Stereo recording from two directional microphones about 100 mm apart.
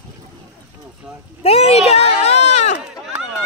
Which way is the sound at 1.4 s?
90° left.